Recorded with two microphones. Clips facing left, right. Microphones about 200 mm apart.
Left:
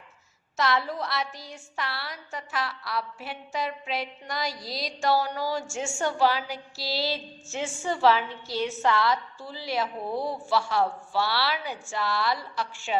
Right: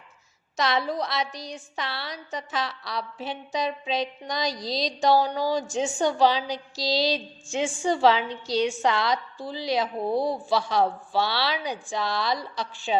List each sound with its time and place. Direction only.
0.5 s a woman's voice: 20° right (ahead or behind)